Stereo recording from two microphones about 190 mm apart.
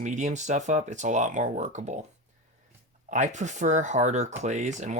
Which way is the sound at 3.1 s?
40° right (ahead or behind).